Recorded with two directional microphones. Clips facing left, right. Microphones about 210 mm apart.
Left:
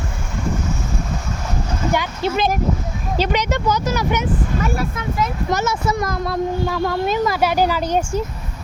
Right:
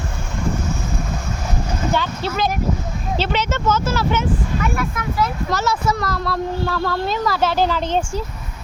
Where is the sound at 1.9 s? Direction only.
15° left (ahead or behind).